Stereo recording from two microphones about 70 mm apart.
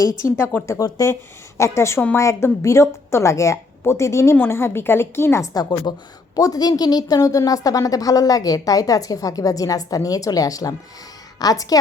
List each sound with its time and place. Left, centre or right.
0.0 s speech: left
0.8 s a woman's voice: left
1.5 s a woman's voice: left
5.4 s a woman's voice: left